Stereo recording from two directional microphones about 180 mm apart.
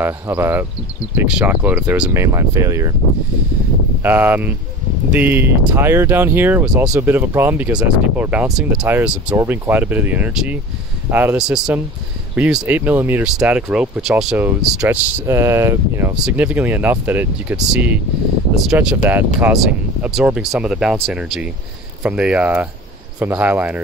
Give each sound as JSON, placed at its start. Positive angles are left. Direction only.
{"t": 0.0, "sound": "speech", "side_deg": -10}
{"t": 4.0, "sound": "speech", "side_deg": -10}